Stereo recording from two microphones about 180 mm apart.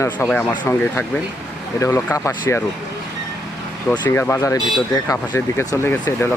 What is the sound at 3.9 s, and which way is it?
Speech, 10° left (ahead or behind).